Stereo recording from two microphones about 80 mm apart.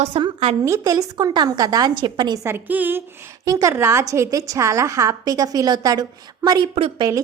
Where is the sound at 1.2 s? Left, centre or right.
Right.